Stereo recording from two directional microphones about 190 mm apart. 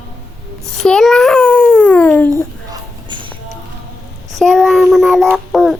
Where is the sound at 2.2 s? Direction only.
20° right (ahead or behind).